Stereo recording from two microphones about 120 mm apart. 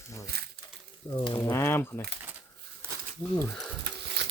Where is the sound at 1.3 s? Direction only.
20° left (ahead or behind).